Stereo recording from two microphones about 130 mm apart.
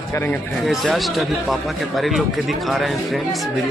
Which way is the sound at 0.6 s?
Centre (ahead or behind).